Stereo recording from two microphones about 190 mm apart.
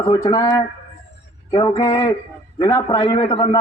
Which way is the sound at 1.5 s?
20° left (ahead or behind).